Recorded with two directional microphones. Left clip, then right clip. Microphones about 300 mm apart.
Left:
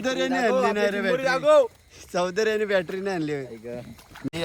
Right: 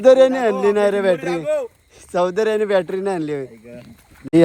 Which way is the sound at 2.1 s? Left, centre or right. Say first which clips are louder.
Right 6 dB; centre.